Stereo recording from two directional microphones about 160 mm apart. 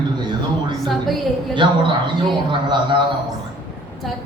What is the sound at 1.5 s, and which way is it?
A man's voice, 30° right (ahead or behind).